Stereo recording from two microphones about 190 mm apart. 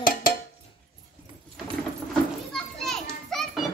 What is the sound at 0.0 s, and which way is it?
Music, 50° left (ahead or behind).